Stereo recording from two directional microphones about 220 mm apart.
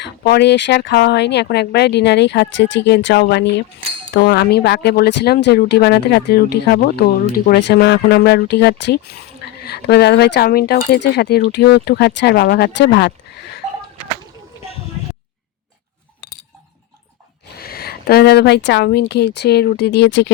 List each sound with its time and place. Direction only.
0.0 s speech: 50° left (ahead or behind)
17.6 s speech: 45° left (ahead or behind)